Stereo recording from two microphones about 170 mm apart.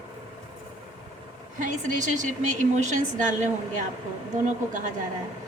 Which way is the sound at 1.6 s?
45° right (ahead or behind).